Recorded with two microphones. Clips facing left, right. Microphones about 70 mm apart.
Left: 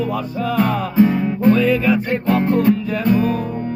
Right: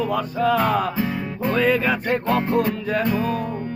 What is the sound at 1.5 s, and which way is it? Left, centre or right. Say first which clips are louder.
Music: left 1 dB; right.